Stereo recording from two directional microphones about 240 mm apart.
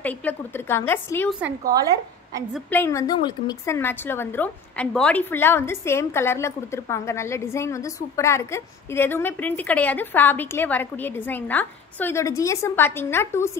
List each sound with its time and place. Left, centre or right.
0.0 s a woman's voice: centre
2.5 s a woman's voice: centre